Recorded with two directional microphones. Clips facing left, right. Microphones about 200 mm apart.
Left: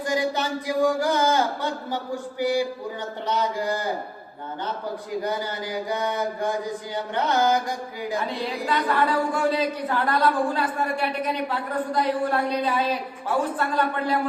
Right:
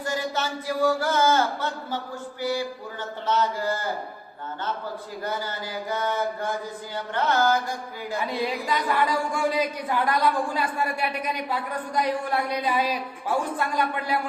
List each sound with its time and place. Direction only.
0.0 s speech: 15° left (ahead or behind)
5.9 s speech: 15° left (ahead or behind)
8.6 s a woman's voice: 10° right (ahead or behind)